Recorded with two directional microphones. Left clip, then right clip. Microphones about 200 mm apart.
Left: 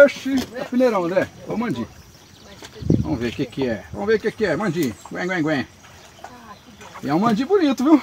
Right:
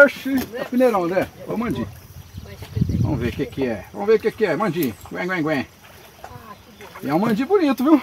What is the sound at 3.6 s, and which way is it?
Speech, 30° left (ahead or behind).